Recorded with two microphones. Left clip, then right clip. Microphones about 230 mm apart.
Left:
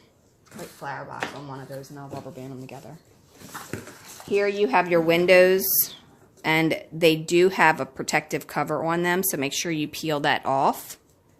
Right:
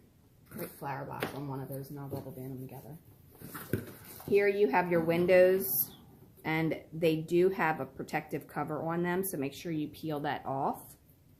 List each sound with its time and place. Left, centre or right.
0.8 s speech: centre
3.7 s a sound: centre
4.3 s a woman's voice: left